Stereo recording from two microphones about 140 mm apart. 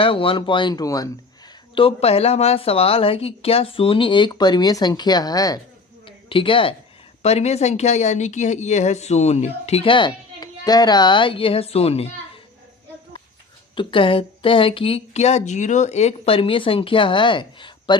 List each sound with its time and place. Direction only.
0.0 s a woman's voice: 40° left (ahead or behind)
1.7 s a woman's voice: 45° left (ahead or behind); by 5.5 s 25° left (ahead or behind)
6.1 s a sound: 40° left (ahead or behind)
7.2 s speech: 50° left (ahead or behind)
13.7 s a woman's voice: 40° left (ahead or behind)